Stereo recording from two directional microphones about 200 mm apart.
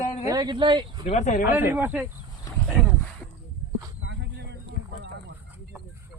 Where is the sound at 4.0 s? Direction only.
65° right (ahead or behind).